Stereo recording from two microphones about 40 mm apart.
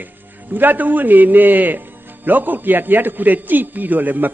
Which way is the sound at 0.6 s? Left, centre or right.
Right.